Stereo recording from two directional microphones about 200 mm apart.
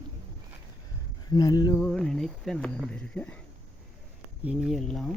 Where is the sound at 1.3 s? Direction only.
20° left (ahead or behind).